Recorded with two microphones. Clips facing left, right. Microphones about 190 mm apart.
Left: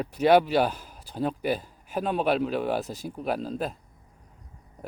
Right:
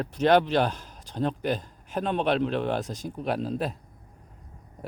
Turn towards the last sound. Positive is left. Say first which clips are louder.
# right 1 dB
turn(degrees=0)  # may be behind; listen again after turning